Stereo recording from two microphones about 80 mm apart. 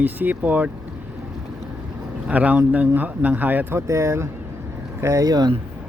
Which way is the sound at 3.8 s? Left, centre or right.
Right.